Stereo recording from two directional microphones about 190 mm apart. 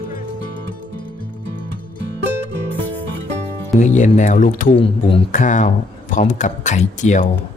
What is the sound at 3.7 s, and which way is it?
Speech, 40° left (ahead or behind).